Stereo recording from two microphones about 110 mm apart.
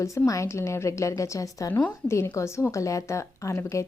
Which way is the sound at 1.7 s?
15° left (ahead or behind).